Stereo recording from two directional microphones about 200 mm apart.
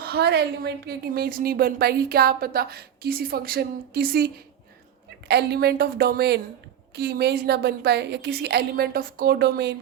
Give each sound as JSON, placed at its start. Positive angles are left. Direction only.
{"t": 0.0, "sound": "a woman's voice", "side_deg": -50}
{"t": 5.3, "sound": "a woman's voice", "side_deg": -55}